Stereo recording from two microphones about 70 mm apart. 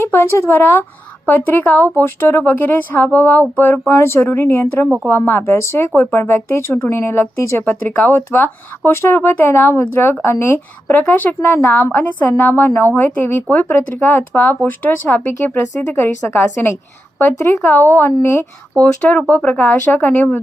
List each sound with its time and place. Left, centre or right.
0.0 s speech: left
3.9 s speech: left
7.6 s speech: left